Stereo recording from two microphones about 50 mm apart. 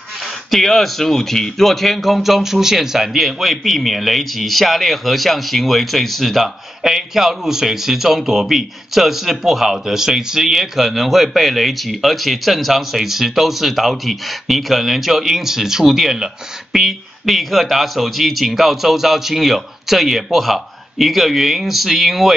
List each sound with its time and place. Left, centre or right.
0.2 s speech: centre